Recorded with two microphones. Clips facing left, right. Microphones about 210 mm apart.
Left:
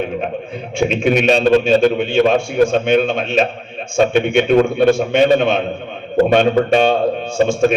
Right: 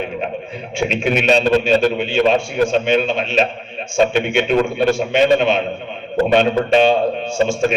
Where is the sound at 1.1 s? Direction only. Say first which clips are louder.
Left 2 dB; 50° left (ahead or behind).